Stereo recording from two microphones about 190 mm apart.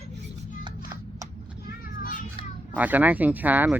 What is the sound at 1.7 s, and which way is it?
Children playing, 45° left (ahead or behind).